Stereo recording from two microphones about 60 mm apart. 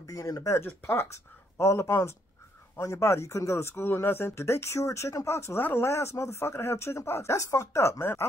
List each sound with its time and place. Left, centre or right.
0.0 s speech: left
0.5 s speech: left
1.0 s speech: left
7.3 s speech: left
8.0 s speech: left